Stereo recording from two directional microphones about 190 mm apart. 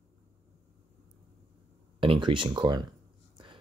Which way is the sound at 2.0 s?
25° right (ahead or behind).